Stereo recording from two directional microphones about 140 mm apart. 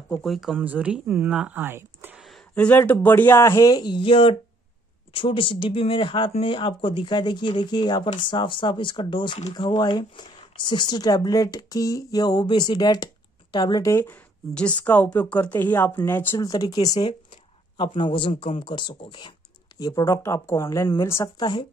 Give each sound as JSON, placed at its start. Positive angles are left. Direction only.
{"t": 0.1, "sound": "speech", "side_deg": 0}
{"t": 0.6, "sound": "speech", "side_deg": -10}
{"t": 2.1, "sound": "a sound", "side_deg": 0}
{"t": 2.5, "sound": "speech", "side_deg": 10}
{"t": 16.3, "sound": "speech", "side_deg": 25}